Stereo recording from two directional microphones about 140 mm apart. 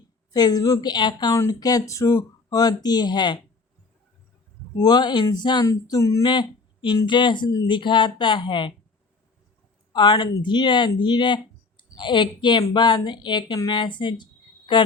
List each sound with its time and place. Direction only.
0.3 s speech: 30° left (ahead or behind)
4.8 s a woman's voice: 30° left (ahead or behind)
9.9 s a woman's voice: 35° left (ahead or behind)